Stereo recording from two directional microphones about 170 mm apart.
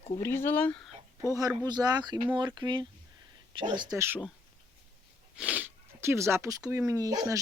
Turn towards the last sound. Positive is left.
turn(degrees=-20)  # may be behind; listen again after turning